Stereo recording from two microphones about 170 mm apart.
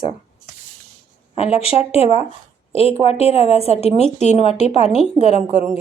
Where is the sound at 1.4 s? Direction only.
35° left (ahead or behind).